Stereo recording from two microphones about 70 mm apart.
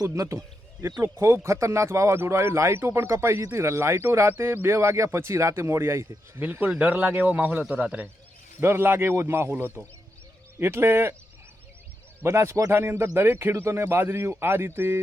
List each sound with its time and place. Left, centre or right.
0.2 s speech: right
6.4 s speech: right
8.6 s speech: right
12.2 s speech: right
12.7 s speech: right